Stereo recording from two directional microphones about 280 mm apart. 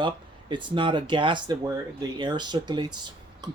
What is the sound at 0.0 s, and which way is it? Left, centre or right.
Speech, centre.